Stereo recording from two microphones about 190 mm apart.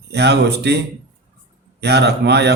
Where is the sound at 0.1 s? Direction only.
60° right (ahead or behind).